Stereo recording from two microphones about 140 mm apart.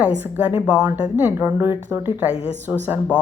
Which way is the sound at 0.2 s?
10° right (ahead or behind).